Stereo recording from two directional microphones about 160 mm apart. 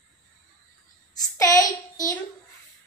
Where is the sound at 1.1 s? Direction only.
20° left (ahead or behind).